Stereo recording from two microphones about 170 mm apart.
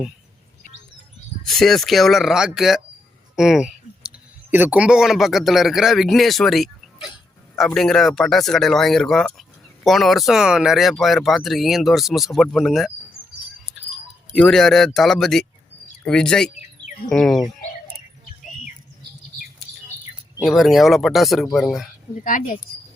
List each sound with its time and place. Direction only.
1.5 s speech: centre (ahead or behind)
3.3 s clicking: centre (ahead or behind)
4.5 s speech: 10° right (ahead or behind)
14.3 s speech: 5° left (ahead or behind)
20.4 s speech: centre (ahead or behind)
22.2 s speech: 50° left (ahead or behind)